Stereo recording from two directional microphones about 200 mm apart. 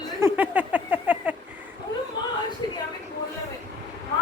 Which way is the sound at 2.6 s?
20° left (ahead or behind).